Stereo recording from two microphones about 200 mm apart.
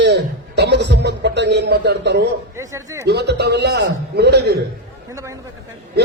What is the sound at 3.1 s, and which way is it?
A man's voice, 55° right (ahead or behind).